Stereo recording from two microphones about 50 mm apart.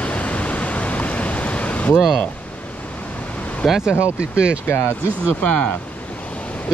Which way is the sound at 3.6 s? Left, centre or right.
Centre.